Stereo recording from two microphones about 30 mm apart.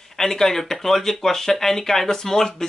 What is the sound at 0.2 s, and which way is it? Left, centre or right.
Speech, centre.